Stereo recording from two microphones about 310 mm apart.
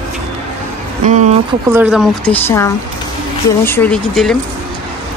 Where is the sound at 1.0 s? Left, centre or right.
Right.